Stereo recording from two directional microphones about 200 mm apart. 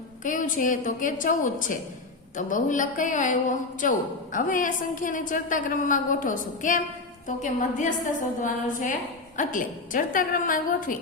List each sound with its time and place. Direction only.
0.3 s a woman's voice: 40° left (ahead or behind)